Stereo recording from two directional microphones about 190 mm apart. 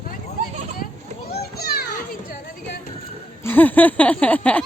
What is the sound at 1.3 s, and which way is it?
Children playing, 55° left (ahead or behind).